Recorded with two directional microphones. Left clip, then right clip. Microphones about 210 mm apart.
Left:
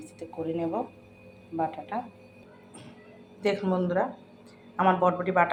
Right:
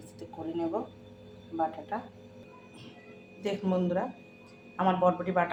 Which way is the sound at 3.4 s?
15° left (ahead or behind).